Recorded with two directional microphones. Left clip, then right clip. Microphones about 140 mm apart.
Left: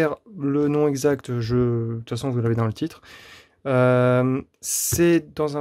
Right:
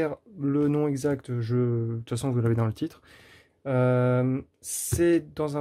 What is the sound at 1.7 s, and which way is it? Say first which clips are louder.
Speech: left 4 dB; 25° left (ahead or behind).